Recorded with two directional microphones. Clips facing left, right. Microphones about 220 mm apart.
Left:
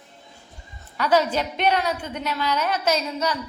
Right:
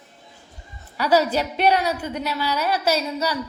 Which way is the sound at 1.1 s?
35° right (ahead or behind).